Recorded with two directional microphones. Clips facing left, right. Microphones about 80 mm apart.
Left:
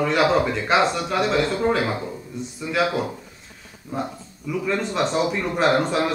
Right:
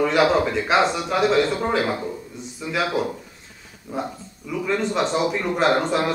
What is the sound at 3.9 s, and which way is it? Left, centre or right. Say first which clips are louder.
A man's voice: even; centre.